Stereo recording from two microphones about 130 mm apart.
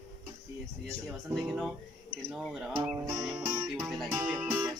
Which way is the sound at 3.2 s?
5° right (ahead or behind).